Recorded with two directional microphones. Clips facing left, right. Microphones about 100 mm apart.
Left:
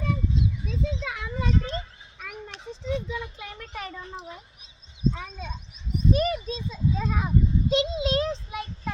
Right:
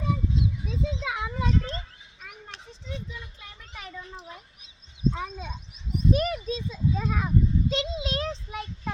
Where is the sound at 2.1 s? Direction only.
75° left (ahead or behind).